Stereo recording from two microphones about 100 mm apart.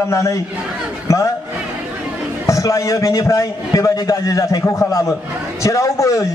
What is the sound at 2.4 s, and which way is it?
A man's voice, 35° left (ahead or behind).